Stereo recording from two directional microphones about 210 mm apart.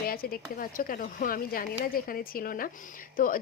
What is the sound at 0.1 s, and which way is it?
A woman's voice, 45° left (ahead or behind).